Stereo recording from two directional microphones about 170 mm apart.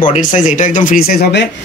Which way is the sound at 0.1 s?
50° left (ahead or behind).